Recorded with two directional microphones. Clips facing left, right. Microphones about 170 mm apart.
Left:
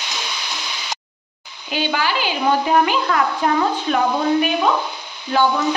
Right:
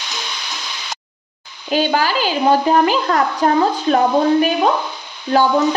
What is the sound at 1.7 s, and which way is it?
A woman's voice, 40° right (ahead or behind).